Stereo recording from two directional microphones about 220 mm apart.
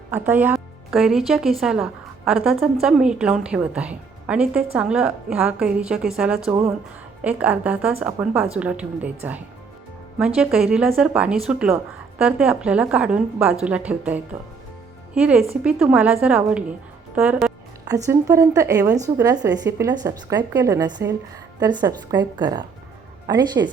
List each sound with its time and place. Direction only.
0.1 s a woman's voice: 10° right (ahead or behind)
17.8 s a woman's voice: 15° right (ahead or behind)